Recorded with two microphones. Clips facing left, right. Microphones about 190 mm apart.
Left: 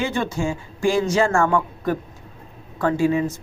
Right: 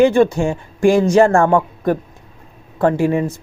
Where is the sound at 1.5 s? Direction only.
40° right (ahead or behind).